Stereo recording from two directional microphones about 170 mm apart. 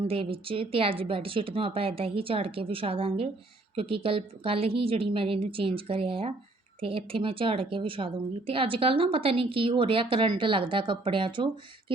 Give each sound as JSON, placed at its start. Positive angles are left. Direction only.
{"t": 0.0, "sound": "a woman's voice", "side_deg": -35}